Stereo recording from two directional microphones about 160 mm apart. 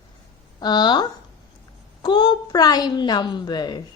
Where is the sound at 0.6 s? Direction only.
25° left (ahead or behind).